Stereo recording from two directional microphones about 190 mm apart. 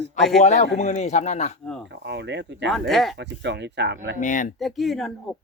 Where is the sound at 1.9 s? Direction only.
65° right (ahead or behind).